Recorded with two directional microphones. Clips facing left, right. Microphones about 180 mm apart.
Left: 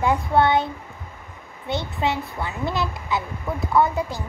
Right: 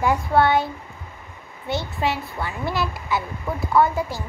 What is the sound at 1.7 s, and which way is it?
A child's voice, 20° left (ahead or behind).